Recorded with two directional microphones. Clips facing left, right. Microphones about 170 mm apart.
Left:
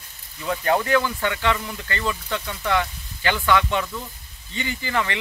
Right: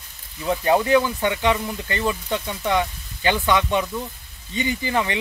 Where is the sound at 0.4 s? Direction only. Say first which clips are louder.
Right 3 dB; 20° right (ahead or behind).